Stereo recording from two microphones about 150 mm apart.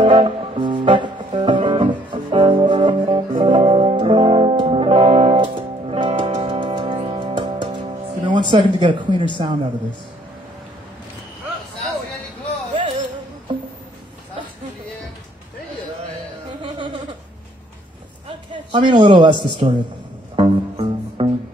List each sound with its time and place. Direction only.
0.0 s music: 35° right (ahead or behind)
16.6 s a sound: 30° right (ahead or behind)
18.5 s a man's voice: 30° right (ahead or behind)
20.3 s music: 35° right (ahead or behind)